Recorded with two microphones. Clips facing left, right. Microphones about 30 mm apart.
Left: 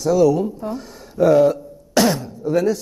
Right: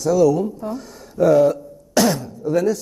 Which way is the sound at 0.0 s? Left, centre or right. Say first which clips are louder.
Even; left.